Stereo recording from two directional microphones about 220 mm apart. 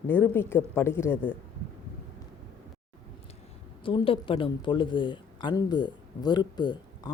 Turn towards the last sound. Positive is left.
turn(degrees=20)  # may be behind; listen again after turning